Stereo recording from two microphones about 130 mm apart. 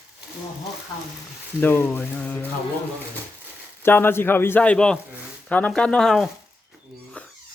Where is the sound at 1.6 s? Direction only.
20° left (ahead or behind).